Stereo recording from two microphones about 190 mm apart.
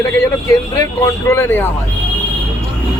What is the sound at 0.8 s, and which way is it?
Speech, 15° left (ahead or behind).